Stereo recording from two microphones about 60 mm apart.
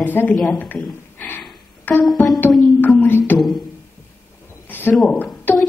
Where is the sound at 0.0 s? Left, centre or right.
Left.